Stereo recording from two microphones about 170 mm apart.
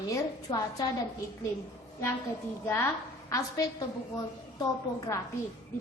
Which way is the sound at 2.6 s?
15° left (ahead or behind).